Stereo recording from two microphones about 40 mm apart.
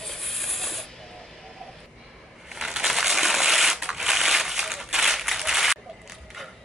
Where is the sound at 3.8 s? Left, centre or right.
Centre.